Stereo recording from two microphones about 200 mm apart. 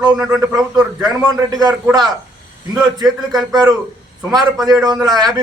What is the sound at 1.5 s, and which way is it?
Speech, 20° right (ahead or behind).